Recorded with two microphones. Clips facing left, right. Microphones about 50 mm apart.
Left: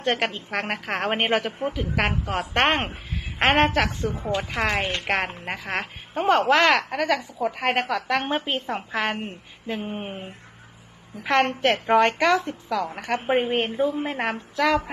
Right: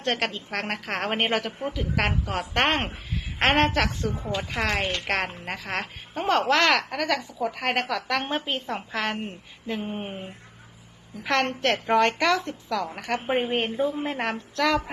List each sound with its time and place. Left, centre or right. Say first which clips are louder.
0.0 s a woman's voice: left 3 dB; centre
4.1 s a woman's voice: left 3 dB; centre